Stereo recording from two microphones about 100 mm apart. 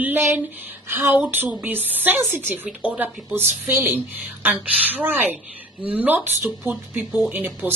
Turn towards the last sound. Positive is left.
turn(degrees=-20)  # may be behind; listen again after turning